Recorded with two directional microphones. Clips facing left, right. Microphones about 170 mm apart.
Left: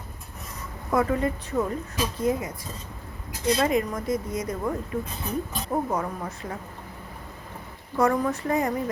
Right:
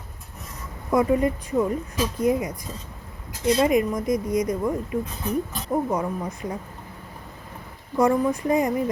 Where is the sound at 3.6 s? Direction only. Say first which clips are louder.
Right 6 dB; 15° right (ahead or behind).